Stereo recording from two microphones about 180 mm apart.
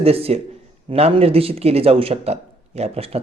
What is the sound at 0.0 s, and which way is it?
Speech, 35° right (ahead or behind).